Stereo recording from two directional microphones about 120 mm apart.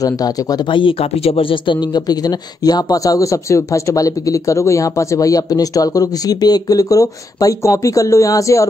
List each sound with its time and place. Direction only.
0.0 s speech: 30° left (ahead or behind)